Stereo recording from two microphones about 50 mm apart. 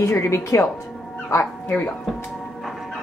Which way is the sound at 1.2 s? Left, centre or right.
Left.